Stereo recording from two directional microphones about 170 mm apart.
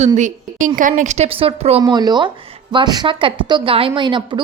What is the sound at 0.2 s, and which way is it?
A woman's voice, 45° right (ahead or behind).